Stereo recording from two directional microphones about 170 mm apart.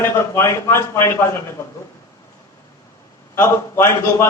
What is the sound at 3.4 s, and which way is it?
Speech, 15° left (ahead or behind).